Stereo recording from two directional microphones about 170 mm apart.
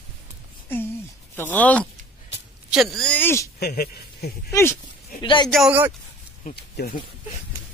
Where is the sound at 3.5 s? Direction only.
65° left (ahead or behind).